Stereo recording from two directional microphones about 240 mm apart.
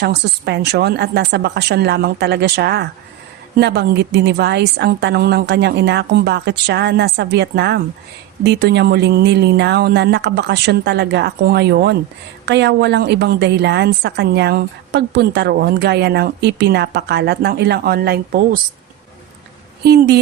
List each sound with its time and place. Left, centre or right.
0.0 s a woman's voice: right
19.8 s speech: right